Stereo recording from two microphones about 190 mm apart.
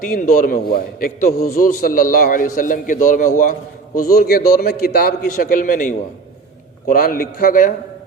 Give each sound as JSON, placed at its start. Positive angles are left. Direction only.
{"t": 0.0, "sound": "a man's voice", "side_deg": 45}
{"t": 4.1, "sound": "a man's voice", "side_deg": 55}